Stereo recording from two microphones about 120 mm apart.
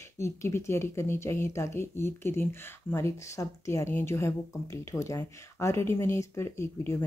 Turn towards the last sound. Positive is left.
turn(degrees=20)  # may be behind; listen again after turning